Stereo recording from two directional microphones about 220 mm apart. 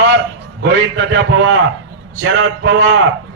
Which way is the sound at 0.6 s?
55° right (ahead or behind).